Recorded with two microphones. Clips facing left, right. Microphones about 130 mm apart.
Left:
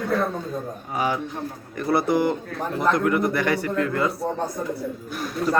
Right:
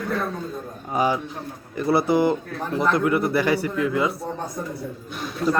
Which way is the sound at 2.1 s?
25° right (ahead or behind).